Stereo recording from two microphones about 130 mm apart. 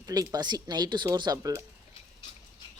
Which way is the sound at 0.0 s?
30° right (ahead or behind).